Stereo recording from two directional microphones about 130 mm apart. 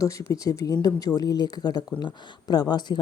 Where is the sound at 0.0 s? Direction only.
25° left (ahead or behind).